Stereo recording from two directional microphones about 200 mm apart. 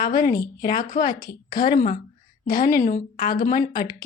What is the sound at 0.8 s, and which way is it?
Speech, 45° left (ahead or behind).